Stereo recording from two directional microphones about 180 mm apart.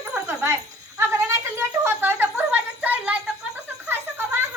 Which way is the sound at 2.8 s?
10° right (ahead or behind).